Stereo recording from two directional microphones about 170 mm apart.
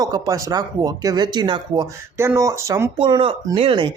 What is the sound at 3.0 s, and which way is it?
Speech, 30° right (ahead or behind).